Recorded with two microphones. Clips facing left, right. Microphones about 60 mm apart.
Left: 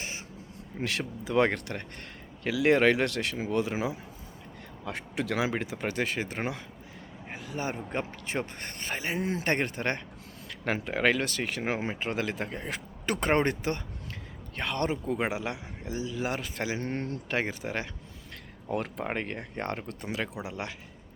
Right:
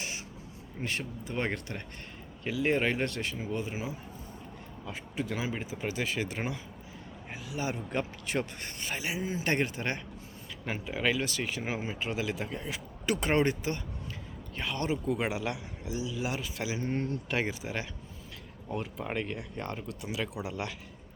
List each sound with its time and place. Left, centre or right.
0.8 s speech: left
1.5 s speech: left
2.4 s speech: left
4.9 s a man's voice: left
8.6 s speech: left
10.6 s speech: left
10.8 s speech: left
11.9 s speech: left
12.6 s speech: left
14.8 s speech: left
19.0 s speech: left